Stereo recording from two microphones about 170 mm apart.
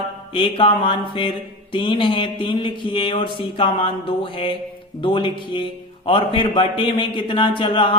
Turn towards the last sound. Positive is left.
turn(degrees=30)  # may be behind; listen again after turning